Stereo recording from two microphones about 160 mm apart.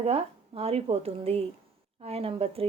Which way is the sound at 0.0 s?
40° right (ahead or behind).